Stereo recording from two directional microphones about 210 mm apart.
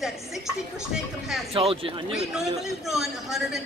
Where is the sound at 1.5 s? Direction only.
25° right (ahead or behind).